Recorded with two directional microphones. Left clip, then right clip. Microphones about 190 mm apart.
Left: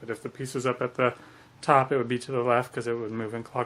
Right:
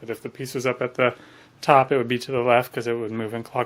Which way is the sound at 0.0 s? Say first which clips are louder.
Right 3 dB; 15° right (ahead or behind).